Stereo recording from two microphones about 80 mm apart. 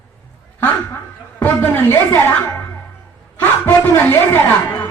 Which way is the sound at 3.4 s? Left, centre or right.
Left.